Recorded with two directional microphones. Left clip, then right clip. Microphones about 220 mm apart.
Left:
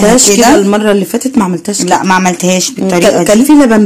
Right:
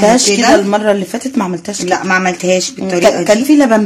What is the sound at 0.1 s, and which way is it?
Speech, 10° left (ahead or behind).